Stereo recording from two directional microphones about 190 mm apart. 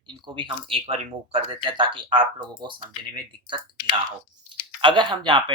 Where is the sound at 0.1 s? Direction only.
25° right (ahead or behind).